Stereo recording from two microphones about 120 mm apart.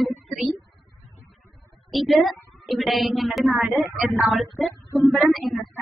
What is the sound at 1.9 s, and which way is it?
Child singing, centre (ahead or behind).